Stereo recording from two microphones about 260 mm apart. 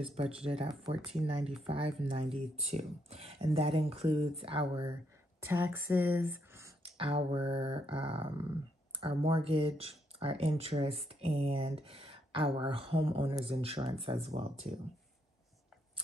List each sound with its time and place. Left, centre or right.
0.5 s speech: right
5.4 s speech: centre
6.8 s speech: right